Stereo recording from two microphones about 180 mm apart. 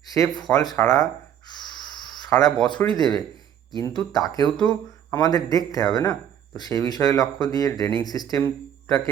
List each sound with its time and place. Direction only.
0.1 s speech: 20° left (ahead or behind)
1.5 s a sound: 25° left (ahead or behind)
3.8 s speech: 20° left (ahead or behind)